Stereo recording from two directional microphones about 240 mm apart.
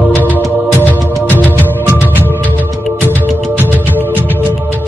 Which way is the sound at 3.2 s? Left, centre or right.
Centre.